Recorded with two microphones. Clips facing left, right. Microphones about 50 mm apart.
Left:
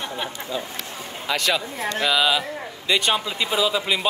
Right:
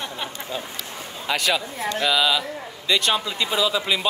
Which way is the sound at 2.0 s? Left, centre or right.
Centre.